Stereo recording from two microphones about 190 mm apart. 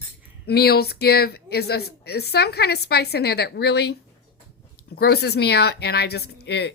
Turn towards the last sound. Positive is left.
turn(degrees=60)  # may be behind; listen again after turning